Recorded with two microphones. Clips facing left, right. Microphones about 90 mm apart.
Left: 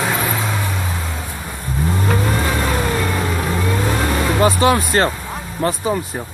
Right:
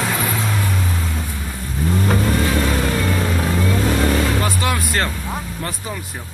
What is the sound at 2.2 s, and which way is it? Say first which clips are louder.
Vehicle: right 1 dB; 30° left (ahead or behind).